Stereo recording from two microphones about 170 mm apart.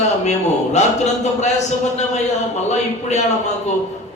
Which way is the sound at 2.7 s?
40° left (ahead or behind).